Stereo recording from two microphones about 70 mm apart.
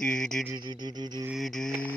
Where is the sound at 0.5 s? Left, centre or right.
Right.